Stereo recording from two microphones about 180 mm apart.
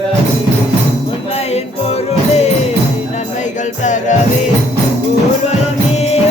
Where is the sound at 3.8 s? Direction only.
40° left (ahead or behind).